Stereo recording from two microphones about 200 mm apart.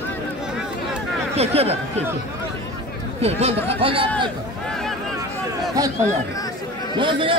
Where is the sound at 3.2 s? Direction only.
30° right (ahead or behind).